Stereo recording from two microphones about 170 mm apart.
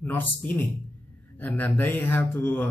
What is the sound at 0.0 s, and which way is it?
Speech, 10° left (ahead or behind).